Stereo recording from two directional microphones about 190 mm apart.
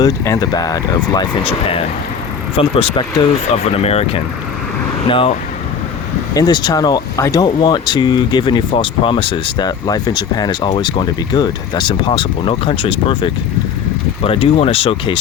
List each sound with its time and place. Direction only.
0.0 s speech: 20° left (ahead or behind)
6.3 s speech: 20° left (ahead or behind)